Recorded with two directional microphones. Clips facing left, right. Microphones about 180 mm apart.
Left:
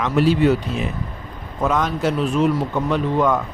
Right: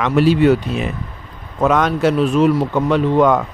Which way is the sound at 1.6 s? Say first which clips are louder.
Right 5 dB; 70° right (ahead or behind).